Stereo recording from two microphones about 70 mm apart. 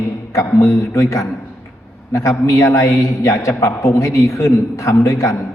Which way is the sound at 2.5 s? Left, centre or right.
Left.